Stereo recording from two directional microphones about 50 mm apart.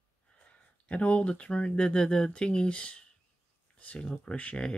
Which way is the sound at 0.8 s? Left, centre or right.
Left.